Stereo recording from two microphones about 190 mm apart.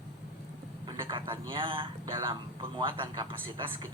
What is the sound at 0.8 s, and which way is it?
A man's voice, 25° right (ahead or behind).